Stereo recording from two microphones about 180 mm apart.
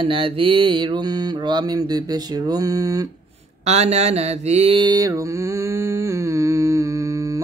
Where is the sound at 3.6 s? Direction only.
35° right (ahead or behind).